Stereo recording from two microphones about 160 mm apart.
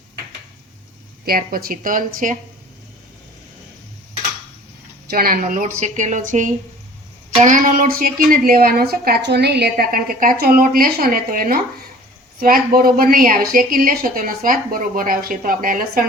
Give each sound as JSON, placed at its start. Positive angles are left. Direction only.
{"t": 1.2, "sound": "a woman's voice", "side_deg": -65}
{"t": 5.0, "sound": "a woman's voice", "side_deg": -65}